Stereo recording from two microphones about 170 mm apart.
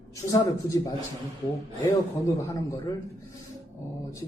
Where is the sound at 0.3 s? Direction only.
20° left (ahead or behind).